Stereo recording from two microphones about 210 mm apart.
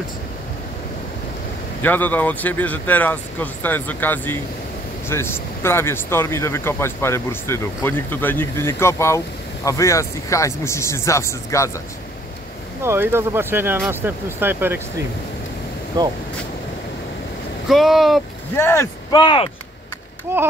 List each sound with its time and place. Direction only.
1.8 s speech: 10° left (ahead or behind)
12.8 s speech: 10° right (ahead or behind)
16.0 s speech: 20° right (ahead or behind)
17.6 s speech: centre (ahead or behind)
18.6 s speech: 10° left (ahead or behind)
19.2 s speech: 25° left (ahead or behind)
20.3 s speech: 10° right (ahead or behind)